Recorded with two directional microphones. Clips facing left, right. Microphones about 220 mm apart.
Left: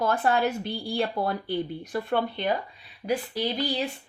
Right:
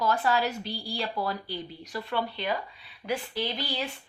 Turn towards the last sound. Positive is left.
turn(degrees=40)  # may be behind; listen again after turning